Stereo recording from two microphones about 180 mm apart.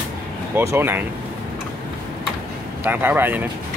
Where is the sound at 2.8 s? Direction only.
10° right (ahead or behind).